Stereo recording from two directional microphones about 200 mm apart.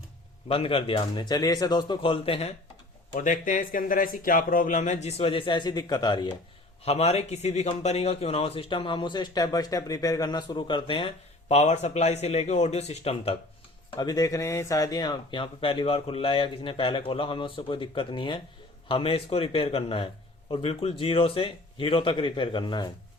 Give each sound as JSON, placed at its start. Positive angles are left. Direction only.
{"t": 0.4, "sound": "speech", "side_deg": 30}
{"t": 3.2, "sound": "speech", "side_deg": 40}